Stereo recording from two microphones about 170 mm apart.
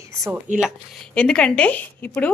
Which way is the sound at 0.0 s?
15° right (ahead or behind).